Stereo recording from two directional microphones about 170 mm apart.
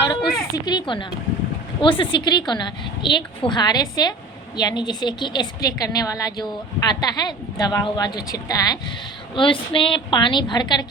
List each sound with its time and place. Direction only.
0.2 s speech: centre (ahead or behind)
0.5 s a woman's voice: 25° left (ahead or behind)